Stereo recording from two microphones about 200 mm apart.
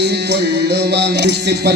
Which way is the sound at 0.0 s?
55° right (ahead or behind).